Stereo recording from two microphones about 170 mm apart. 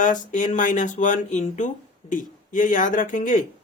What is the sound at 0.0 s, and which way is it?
Speech, 50° left (ahead or behind).